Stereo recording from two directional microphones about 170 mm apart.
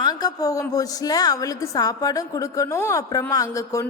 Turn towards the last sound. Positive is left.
turn(degrees=20)  # may be behind; listen again after turning